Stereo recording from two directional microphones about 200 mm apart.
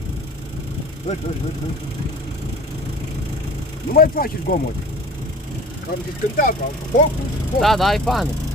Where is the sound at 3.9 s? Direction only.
45° left (ahead or behind).